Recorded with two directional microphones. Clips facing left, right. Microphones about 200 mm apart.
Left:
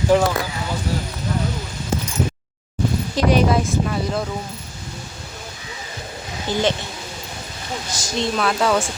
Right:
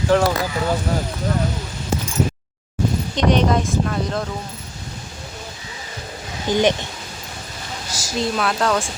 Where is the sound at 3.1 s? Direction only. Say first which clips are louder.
Left 1 dB; 5° left (ahead or behind).